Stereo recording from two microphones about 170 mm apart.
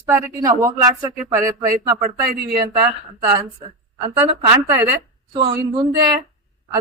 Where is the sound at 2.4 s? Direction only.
70° right (ahead or behind).